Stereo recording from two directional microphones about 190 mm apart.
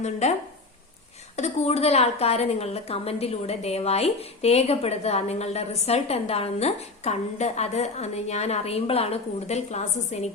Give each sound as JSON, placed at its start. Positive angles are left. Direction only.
{"t": 0.0, "sound": "a woman's voice", "side_deg": 35}
{"t": 1.4, "sound": "a woman's voice", "side_deg": 35}